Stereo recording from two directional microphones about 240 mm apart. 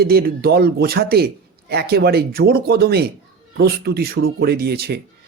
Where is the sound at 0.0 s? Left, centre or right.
Right.